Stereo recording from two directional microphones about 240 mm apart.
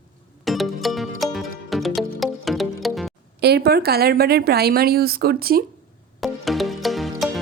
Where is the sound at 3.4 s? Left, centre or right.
Right.